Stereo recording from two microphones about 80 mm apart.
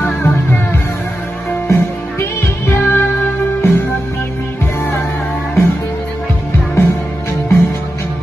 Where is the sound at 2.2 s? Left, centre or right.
Left.